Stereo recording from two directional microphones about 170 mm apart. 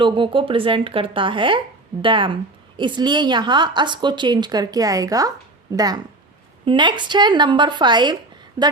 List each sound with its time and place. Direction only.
0.0 s speech: 30° right (ahead or behind)